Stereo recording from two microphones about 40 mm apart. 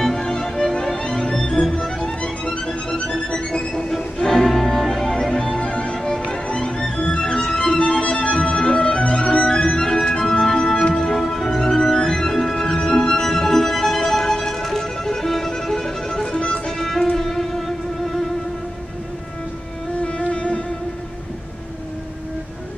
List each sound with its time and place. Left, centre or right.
0.0 s music: centre
5.9 s music: centre
8.0 s music: left; by 16.3 s centre
16.3 s music: left
16.6 s music: centre
20.1 s music: left